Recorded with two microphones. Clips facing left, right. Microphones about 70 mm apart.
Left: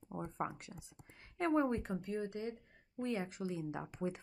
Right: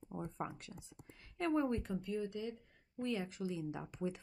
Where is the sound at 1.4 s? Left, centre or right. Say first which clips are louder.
Left 2 dB; left.